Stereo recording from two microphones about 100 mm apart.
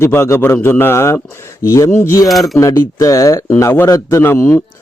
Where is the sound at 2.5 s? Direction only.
35° left (ahead or behind).